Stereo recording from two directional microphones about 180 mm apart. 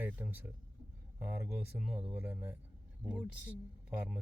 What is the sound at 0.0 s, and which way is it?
Speech, 10° right (ahead or behind).